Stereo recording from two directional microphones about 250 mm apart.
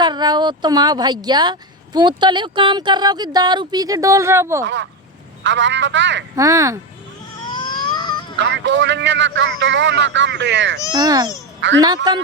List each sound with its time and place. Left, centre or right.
0.0 s speech: centre
4.6 s speech: right
6.3 s speech: centre
7.4 s a sound: centre
8.4 s speech: right
10.9 s speech: centre